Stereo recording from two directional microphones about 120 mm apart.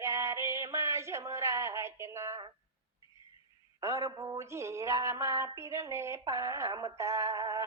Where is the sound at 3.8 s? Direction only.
25° right (ahead or behind).